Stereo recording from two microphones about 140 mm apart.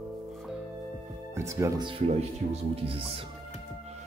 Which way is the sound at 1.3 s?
20° right (ahead or behind).